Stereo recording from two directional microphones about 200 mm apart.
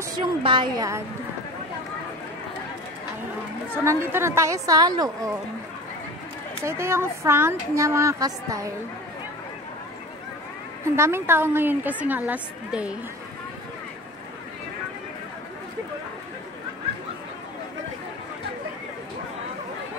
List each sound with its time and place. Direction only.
0.2 s a woman's voice: 25° right (ahead or behind)
3.8 s speech: 15° right (ahead or behind)
6.6 s speech: 15° right (ahead or behind)
11.0 s speech: 10° right (ahead or behind)